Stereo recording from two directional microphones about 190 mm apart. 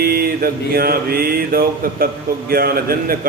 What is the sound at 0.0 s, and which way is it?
Mantra, 55° right (ahead or behind).